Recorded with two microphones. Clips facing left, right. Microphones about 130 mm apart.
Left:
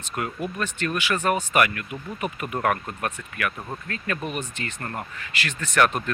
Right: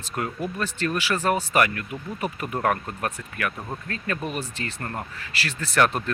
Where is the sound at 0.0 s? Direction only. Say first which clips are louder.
Even; 35° right (ahead or behind).